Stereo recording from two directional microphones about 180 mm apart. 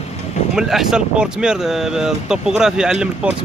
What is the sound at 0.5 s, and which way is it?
Speech, centre (ahead or behind).